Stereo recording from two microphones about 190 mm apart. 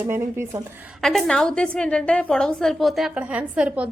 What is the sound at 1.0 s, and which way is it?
A woman's voice, centre (ahead or behind).